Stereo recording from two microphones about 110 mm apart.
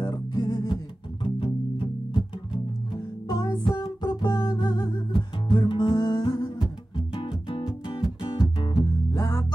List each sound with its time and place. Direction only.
0.0 s music: 40° left (ahead or behind)
1.2 s music: 50° left (ahead or behind)
7.2 s music: 50° left (ahead or behind)
9.1 s music: 30° left (ahead or behind)